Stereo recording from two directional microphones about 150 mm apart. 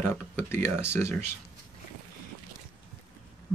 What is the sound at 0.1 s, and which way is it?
Speech, 15° left (ahead or behind).